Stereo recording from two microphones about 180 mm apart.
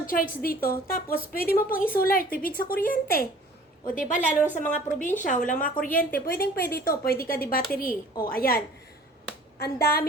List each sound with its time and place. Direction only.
0.0 s a woman's voice: 50° left (ahead or behind)